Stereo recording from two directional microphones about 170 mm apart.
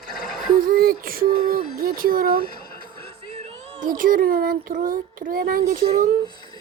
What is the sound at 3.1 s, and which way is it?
Music, 40° right (ahead or behind).